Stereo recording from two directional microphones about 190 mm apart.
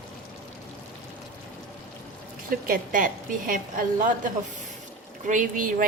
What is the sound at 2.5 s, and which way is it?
A woman's voice, 50° right (ahead or behind).